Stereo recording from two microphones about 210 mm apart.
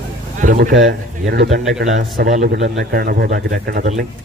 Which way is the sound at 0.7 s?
55° right (ahead or behind).